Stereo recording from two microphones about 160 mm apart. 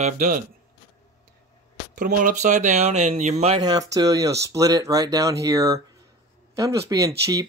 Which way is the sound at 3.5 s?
25° right (ahead or behind).